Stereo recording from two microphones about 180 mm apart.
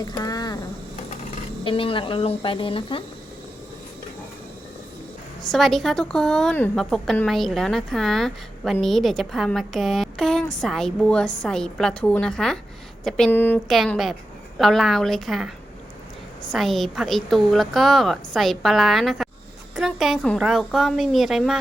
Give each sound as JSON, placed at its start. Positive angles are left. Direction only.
{"t": 0.0, "sound": "speech", "side_deg": 20}
{"t": 1.6, "sound": "speech", "side_deg": 30}
{"t": 5.4, "sound": "a woman's voice", "side_deg": 0}
{"t": 13.7, "sound": "a woman's voice", "side_deg": 0}
{"t": 16.5, "sound": "a woman's voice", "side_deg": 0}